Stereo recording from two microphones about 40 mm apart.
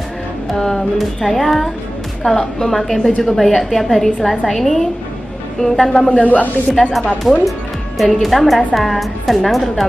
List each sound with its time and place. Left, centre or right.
0.5 s a sound: centre
0.9 s a woman's voice: centre
6.0 s speech: left
6.7 s a woman's voice: centre